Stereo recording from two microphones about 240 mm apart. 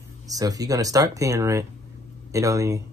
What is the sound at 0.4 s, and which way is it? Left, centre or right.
A man's voice, centre.